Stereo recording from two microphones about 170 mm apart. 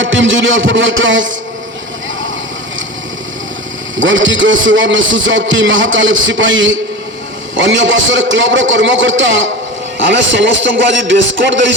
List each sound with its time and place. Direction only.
0.0 s a man's voice: 90° right
4.0 s a man's voice: 90° right